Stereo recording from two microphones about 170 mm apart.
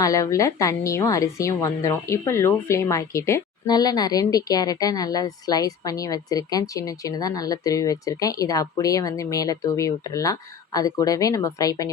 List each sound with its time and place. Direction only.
0.0 s a woman's voice: 20° left (ahead or behind)